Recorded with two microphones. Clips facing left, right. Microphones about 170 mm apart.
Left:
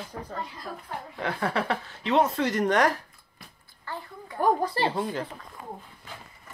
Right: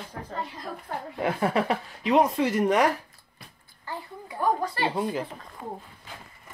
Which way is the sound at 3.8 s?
10° right (ahead or behind).